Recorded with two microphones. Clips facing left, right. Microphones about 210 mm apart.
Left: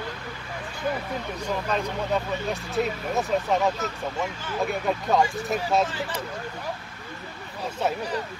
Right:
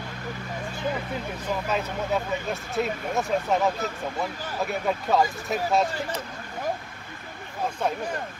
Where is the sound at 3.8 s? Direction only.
35° right (ahead or behind).